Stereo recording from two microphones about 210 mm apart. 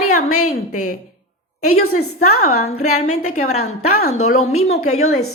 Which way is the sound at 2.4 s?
90° left.